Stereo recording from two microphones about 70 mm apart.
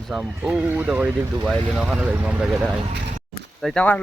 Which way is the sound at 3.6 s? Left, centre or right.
Centre.